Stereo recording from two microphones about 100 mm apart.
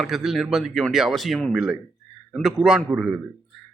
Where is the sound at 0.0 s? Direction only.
5° right (ahead or behind).